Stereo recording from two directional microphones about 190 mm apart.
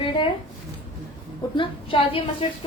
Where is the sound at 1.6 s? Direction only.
25° left (ahead or behind).